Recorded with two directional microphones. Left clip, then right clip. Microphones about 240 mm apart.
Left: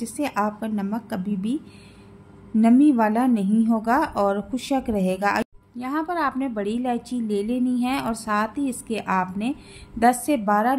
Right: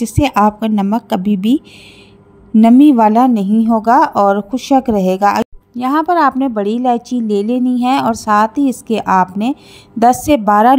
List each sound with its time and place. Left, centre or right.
0.0 s a woman's voice: right